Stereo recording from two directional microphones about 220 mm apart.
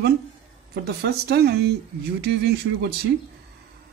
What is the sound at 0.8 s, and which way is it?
Speech, 45° right (ahead or behind).